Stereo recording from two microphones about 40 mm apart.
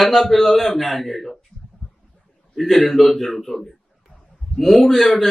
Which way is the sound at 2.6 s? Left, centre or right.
Centre.